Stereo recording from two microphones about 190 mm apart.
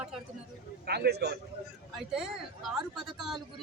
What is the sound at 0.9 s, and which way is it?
Speech, 60° right (ahead or behind).